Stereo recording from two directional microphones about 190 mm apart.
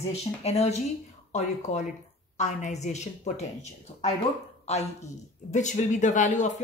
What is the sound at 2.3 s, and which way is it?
Speech, 40° left (ahead or behind).